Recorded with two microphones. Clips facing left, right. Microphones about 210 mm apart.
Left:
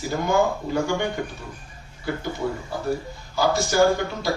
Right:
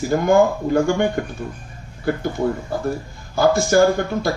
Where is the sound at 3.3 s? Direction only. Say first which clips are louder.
Right 5 dB; 55° right (ahead or behind).